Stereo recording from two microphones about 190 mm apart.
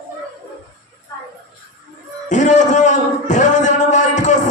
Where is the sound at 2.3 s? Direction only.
40° left (ahead or behind).